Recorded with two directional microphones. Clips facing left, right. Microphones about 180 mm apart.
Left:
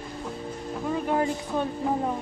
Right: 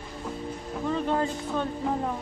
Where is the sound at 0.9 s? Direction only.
10° left (ahead or behind).